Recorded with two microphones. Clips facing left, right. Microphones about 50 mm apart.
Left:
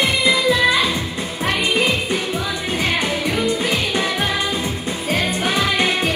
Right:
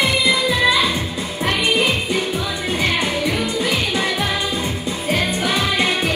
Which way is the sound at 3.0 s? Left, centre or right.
Left.